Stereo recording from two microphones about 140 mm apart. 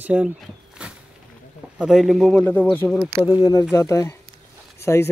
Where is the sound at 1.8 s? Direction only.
Centre (ahead or behind).